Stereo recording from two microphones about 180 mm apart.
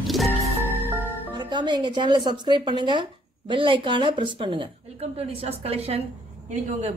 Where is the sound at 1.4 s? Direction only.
25° right (ahead or behind).